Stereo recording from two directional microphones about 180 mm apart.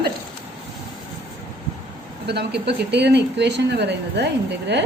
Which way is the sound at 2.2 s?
65° right (ahead or behind).